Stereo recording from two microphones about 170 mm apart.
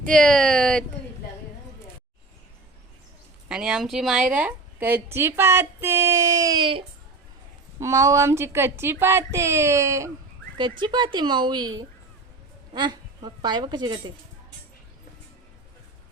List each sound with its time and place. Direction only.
0.1 s speech: 5° left (ahead or behind)
3.5 s a woman's voice: 5° right (ahead or behind)
10.6 s a woman's voice: 25° right (ahead or behind)